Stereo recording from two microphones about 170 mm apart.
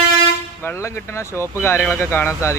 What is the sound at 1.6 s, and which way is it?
Speech, 15° left (ahead or behind).